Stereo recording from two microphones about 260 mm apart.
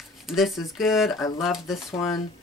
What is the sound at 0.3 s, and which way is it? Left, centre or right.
Speech, centre.